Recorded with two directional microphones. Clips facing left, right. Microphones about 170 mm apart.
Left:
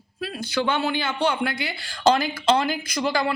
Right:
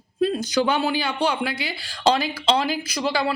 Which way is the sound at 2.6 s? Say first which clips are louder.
Even; 5° right (ahead or behind).